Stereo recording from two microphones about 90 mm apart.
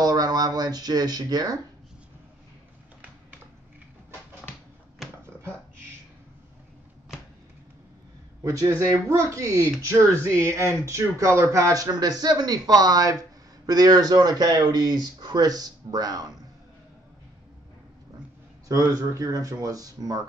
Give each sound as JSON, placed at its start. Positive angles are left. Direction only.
{"t": 0.0, "sound": "a sound", "side_deg": -45}
{"t": 8.5, "sound": "speech", "side_deg": -35}
{"t": 18.7, "sound": "speech", "side_deg": -40}